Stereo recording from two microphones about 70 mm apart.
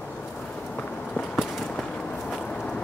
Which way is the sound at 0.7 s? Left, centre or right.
Centre.